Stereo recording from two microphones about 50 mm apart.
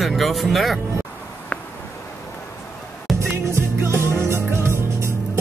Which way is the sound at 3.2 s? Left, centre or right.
Right.